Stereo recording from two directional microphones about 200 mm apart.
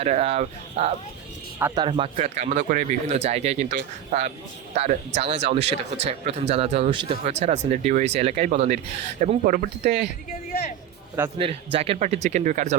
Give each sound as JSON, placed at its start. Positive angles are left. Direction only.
{"t": 0.0, "sound": "speech", "side_deg": -30}
{"t": 1.5, "sound": "speech", "side_deg": -10}
{"t": 1.8, "sound": "speech", "side_deg": -25}
{"t": 11.3, "sound": "speech", "side_deg": -25}